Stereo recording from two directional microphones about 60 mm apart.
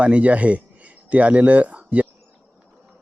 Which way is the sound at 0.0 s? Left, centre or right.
Right.